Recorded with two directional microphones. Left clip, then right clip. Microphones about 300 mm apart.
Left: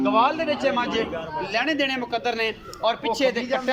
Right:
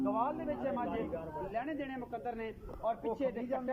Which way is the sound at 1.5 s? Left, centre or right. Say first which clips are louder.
Left 18 dB; left.